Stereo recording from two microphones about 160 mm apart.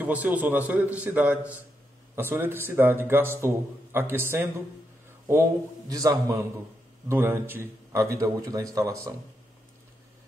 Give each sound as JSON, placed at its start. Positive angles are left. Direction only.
{"t": 0.0, "sound": "a man's voice", "side_deg": -10}